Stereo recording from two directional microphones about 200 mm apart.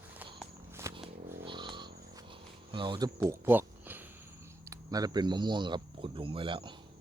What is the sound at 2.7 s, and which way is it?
Speech, 25° right (ahead or behind).